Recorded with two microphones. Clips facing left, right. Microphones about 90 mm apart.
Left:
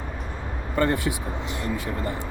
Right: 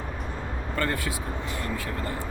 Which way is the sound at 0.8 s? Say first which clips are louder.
Left 6 dB; 20° left (ahead or behind).